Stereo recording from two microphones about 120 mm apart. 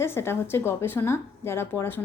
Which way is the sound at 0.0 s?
20° left (ahead or behind).